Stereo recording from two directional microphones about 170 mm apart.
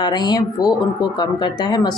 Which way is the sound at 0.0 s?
25° left (ahead or behind).